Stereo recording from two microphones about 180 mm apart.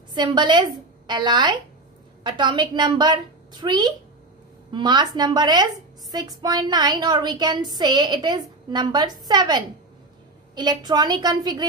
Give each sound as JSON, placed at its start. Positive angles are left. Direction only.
{"t": 0.1, "sound": "a woman's voice", "side_deg": -25}